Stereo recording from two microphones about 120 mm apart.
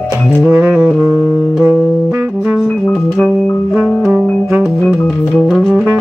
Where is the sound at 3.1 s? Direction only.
Centre (ahead or behind).